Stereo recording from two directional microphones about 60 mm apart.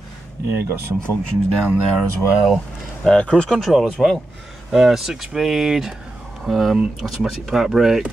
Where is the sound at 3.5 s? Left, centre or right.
Centre.